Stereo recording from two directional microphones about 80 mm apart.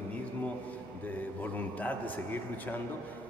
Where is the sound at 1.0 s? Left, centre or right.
Left.